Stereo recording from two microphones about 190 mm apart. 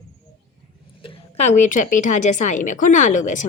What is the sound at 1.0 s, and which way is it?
A woman's voice, 35° left (ahead or behind).